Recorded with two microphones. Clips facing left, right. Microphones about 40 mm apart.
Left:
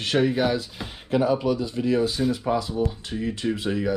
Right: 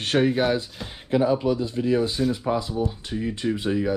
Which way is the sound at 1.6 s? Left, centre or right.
Right.